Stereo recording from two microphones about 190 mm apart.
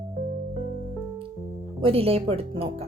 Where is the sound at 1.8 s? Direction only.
30° right (ahead or behind).